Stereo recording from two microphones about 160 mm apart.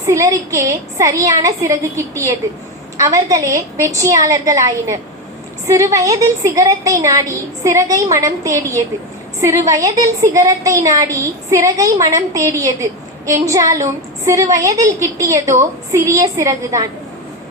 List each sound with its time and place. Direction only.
0.0 s a woman's voice: 20° right (ahead or behind)